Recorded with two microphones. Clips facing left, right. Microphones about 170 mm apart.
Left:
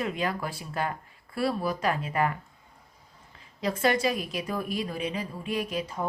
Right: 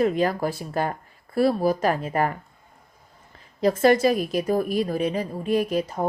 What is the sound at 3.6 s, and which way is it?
A woman's voice, 45° right (ahead or behind).